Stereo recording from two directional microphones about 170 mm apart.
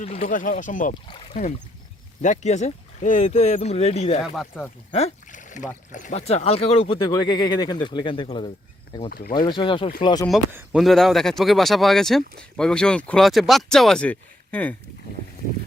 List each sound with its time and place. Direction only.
0.0 s speech: 40° left (ahead or behind)
0.3 s speech: 50° left (ahead or behind)
1.0 s speech: 30° left (ahead or behind)
2.2 s speech: 45° left (ahead or behind)
9.0 s speech: 65° left (ahead or behind)
9.5 s speech: 30° left (ahead or behind)
10.5 s speech: 5° right (ahead or behind)